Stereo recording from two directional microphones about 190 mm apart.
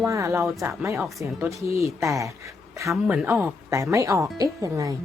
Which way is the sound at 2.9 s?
5° right (ahead or behind).